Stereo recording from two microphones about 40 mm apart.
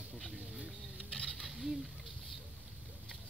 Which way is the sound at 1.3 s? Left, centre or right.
Centre.